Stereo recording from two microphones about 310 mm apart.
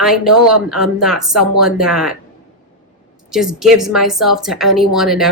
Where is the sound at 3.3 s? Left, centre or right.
Centre.